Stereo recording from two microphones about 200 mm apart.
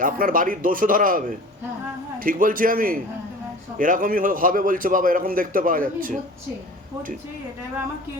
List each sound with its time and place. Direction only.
0.0 s a man's voice: 40° right (ahead or behind)